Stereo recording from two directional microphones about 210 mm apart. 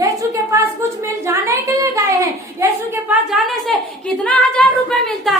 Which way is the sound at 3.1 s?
Centre (ahead or behind).